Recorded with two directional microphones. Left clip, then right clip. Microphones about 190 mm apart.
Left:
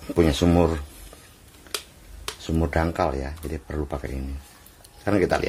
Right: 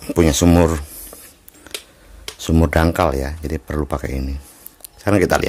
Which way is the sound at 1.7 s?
55° right (ahead or behind).